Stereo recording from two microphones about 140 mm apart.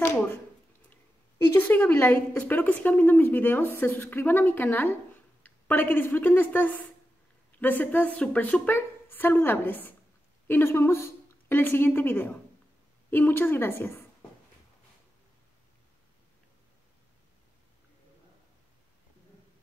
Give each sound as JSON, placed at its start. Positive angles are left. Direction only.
{"t": 1.5, "sound": "a woman's voice", "side_deg": 15}